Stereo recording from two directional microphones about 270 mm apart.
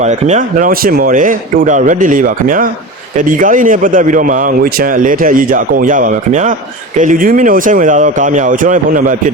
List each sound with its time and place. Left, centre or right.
0.0 s a man's voice: right